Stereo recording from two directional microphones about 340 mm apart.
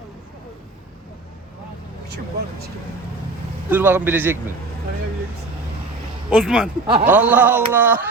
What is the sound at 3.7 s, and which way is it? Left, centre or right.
Speech, centre.